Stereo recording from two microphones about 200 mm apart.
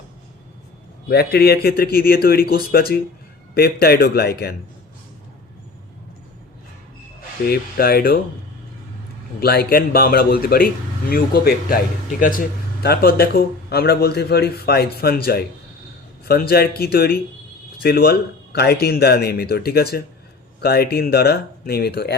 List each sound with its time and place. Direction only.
1.0 s a man's voice: 55° left (ahead or behind)
7.4 s a man's voice: 50° left (ahead or behind)
9.4 s a man's voice: 50° left (ahead or behind)
12.8 s a man's voice: 50° left (ahead or behind)